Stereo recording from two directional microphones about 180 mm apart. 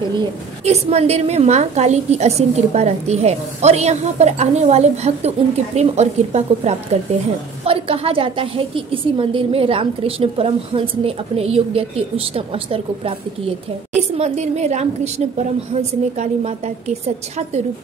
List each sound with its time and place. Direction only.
0.7 s a woman's voice: 35° right (ahead or behind)